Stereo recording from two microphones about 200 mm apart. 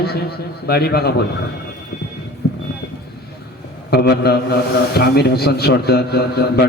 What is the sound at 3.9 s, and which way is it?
A man's voice, 55° left (ahead or behind).